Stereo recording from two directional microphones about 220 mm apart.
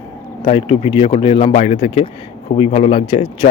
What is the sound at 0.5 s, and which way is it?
A man's voice, 25° left (ahead or behind).